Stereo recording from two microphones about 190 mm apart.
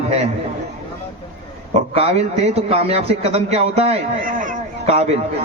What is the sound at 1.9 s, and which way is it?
A man's voice, 30° right (ahead or behind).